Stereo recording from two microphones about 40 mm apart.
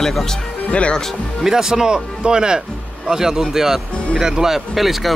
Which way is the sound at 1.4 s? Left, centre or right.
Centre.